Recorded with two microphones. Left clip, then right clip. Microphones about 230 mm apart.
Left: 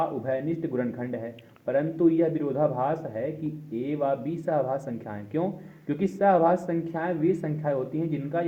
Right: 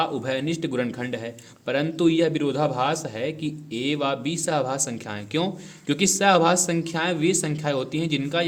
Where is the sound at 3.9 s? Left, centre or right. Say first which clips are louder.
Right 2 dB; right.